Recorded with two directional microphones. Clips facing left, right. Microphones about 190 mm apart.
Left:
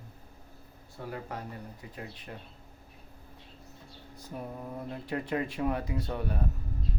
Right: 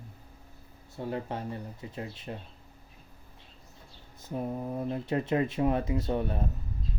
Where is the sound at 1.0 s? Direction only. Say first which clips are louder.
Right 5 dB; 25° right (ahead or behind).